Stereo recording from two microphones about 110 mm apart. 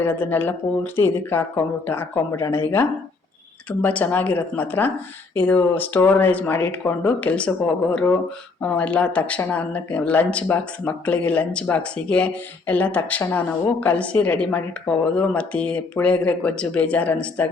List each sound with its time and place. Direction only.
0.0 s speech: 15° left (ahead or behind)
8.6 s speech: 10° left (ahead or behind)